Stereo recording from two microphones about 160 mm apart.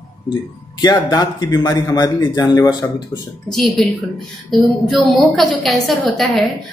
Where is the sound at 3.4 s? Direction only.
Centre (ahead or behind).